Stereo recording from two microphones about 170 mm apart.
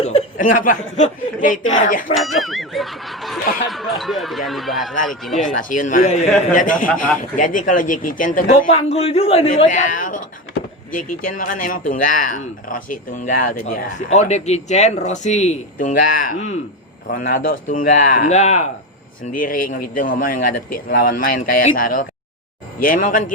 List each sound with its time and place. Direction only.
0.0 s chuckle: 35° left (ahead or behind)
0.3 s speech: 55° left (ahead or behind)
2.1 s speech: centre (ahead or behind)
5.4 s speech: 50° left (ahead or behind)
9.6 s speech: 50° left (ahead or behind)
19.2 s speech: 55° left (ahead or behind)